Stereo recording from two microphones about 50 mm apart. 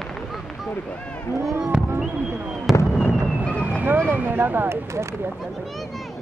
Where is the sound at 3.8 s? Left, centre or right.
Right.